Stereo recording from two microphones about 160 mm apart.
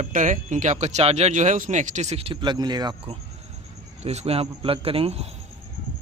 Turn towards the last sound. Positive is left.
turn(degrees=-35)  # may be behind; listen again after turning